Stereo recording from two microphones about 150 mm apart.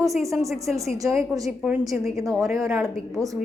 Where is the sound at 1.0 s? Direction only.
20° right (ahead or behind).